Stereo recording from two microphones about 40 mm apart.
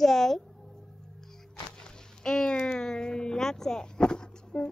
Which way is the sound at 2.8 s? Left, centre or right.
Centre.